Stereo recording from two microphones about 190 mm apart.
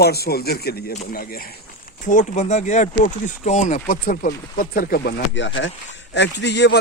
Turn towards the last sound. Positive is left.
turn(degrees=65)  # may be behind; listen again after turning